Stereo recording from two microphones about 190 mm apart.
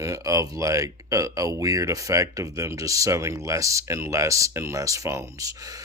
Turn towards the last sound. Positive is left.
turn(degrees=-15)  # may be behind; listen again after turning